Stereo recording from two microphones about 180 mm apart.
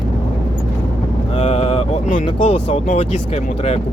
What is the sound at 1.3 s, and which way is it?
Speech, 40° left (ahead or behind).